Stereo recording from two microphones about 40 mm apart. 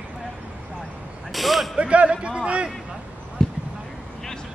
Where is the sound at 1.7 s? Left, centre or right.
Right.